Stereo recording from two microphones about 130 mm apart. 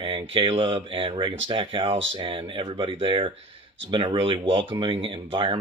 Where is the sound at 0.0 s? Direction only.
40° right (ahead or behind).